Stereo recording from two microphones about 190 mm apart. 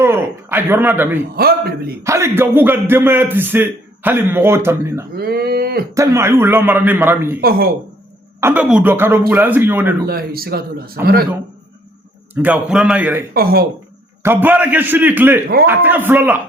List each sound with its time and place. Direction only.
0.0 s speech: 10° right (ahead or behind)
1.4 s a man's voice: 55° right (ahead or behind)
2.0 s a man's voice: 15° right (ahead or behind)
5.1 s speech: 55° right (ahead or behind)
5.9 s a man's voice: 15° right (ahead or behind)
8.4 s a man's voice: 10° right (ahead or behind)
10.1 s a man's voice: 50° right (ahead or behind)
12.3 s a man's voice: 10° right (ahead or behind)
13.3 s a man's voice: 55° right (ahead or behind)
14.2 s a man's voice: 10° right (ahead or behind)